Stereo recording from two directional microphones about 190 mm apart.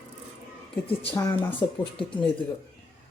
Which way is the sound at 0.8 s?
30° left (ahead or behind).